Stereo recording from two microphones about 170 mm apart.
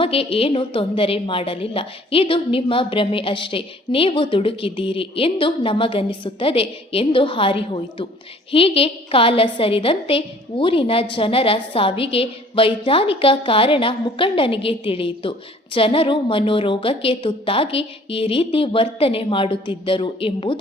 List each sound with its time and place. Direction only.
0.0 s a woman's voice: 35° left (ahead or behind)